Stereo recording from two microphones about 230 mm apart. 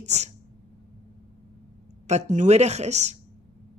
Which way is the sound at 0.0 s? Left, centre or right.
Right.